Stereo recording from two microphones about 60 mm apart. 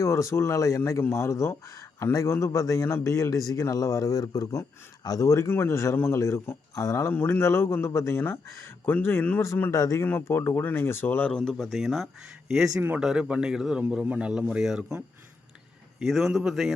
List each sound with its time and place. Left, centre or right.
0.0 s a man's voice: left
5.0 s a man's voice: left
5.5 s speech: left
7.1 s speech: left
9.7 s speech: left
10.0 s speech: left
11.3 s speech: centre
13.1 s speech: centre
16.0 s speech: centre